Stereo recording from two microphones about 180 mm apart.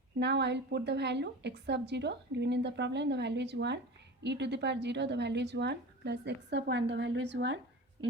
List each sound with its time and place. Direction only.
0.2 s a woman's voice: 70° right (ahead or behind)